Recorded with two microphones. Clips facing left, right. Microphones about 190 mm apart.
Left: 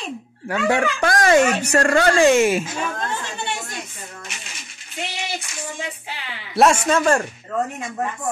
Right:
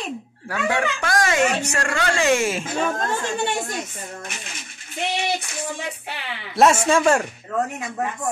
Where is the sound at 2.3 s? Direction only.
15° left (ahead or behind).